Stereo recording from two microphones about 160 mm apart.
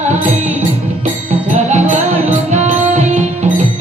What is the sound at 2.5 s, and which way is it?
Music, 45° right (ahead or behind).